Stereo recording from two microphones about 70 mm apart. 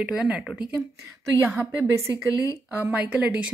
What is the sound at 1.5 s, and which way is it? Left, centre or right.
Speech, right.